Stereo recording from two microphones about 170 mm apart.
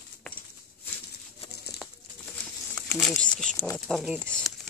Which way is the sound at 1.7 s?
70° left (ahead or behind).